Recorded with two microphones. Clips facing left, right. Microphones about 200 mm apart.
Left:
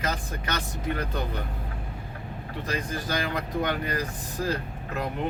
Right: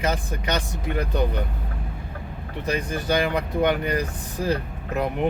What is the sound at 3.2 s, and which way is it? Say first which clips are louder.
Speech: right 6 dB; 20° right (ahead or behind).